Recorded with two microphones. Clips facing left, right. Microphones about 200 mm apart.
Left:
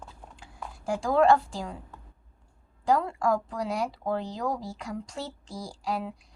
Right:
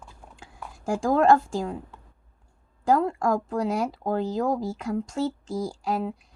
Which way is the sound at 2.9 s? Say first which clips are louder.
Right 3 dB; 45° right (ahead or behind).